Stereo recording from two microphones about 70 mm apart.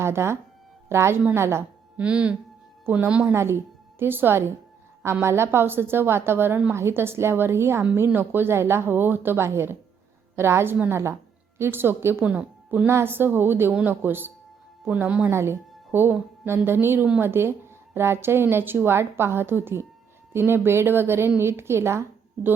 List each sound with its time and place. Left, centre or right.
0.0 s a woman's voice: right
2.0 s speech: centre
2.8 s a woman's voice: right
3.1 s speech: centre
3.3 s a woman's voice: right
12.2 s speech: right
12.9 s a woman's voice: right
14.8 s speech: centre
15.3 s a woman's voice: right